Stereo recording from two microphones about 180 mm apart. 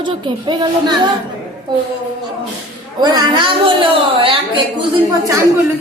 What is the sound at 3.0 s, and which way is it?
A woman's voice, 25° right (ahead or behind).